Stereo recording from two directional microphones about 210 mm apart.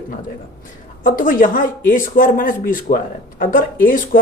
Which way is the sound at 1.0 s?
40° left (ahead or behind).